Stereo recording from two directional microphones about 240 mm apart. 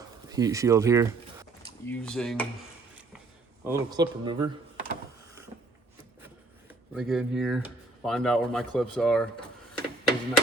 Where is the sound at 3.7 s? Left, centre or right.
Centre.